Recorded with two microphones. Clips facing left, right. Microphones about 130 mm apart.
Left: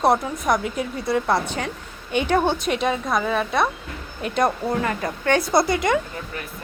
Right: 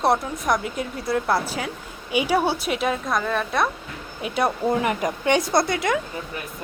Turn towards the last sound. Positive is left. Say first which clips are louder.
# left 2 dB
turn(degrees=0)  # may be behind; listen again after turning